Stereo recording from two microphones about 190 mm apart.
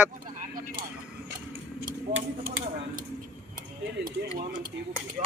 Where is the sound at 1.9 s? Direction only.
50° right (ahead or behind).